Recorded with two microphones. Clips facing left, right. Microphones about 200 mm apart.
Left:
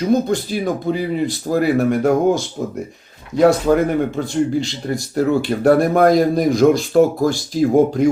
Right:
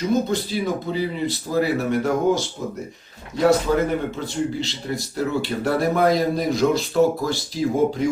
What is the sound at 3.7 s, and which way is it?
Speech, 50° left (ahead or behind).